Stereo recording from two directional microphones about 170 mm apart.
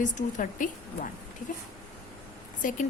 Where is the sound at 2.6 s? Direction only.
50° left (ahead or behind).